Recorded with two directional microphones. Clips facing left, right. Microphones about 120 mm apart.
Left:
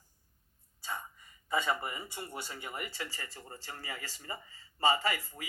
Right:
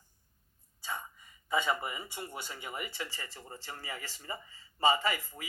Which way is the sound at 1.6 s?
20° right (ahead or behind).